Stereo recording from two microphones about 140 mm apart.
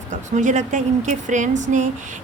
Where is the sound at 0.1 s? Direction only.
60° right (ahead or behind).